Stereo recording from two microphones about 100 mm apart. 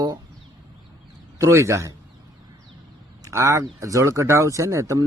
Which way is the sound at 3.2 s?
30° right (ahead or behind).